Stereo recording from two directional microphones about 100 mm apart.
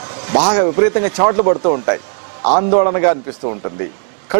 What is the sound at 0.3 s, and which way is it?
A man's voice, 15° right (ahead or behind).